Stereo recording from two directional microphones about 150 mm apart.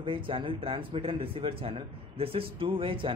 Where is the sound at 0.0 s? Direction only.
35° right (ahead or behind).